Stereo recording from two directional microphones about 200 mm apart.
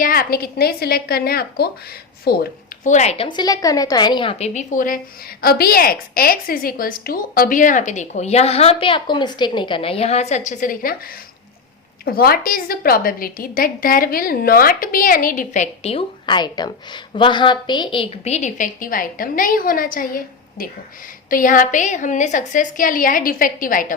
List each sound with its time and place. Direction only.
0.0 s a woman's voice: 45° left (ahead or behind)
2.9 s a woman's voice: 35° left (ahead or behind)
12.0 s a woman's voice: 50° left (ahead or behind)